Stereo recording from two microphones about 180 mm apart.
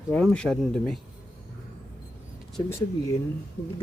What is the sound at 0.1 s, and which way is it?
Speech, 5° left (ahead or behind).